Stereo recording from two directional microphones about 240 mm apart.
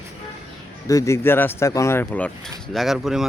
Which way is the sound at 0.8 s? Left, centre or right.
Centre.